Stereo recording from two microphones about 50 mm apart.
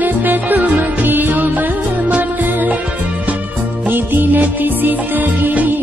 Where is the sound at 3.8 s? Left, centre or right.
Right.